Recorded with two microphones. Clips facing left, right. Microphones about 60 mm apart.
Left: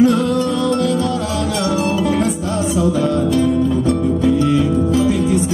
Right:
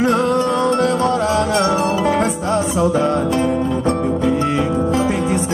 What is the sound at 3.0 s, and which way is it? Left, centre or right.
Music, right.